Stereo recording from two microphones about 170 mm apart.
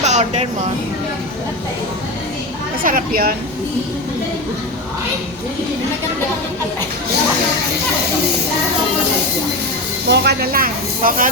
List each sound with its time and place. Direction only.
0.0 s music: 45° right (ahead or behind)
2.8 s speech: 60° right (ahead or behind)
10.1 s speech: 70° right (ahead or behind)